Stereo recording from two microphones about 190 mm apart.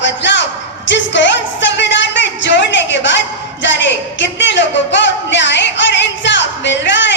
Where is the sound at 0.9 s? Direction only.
70° left (ahead or behind).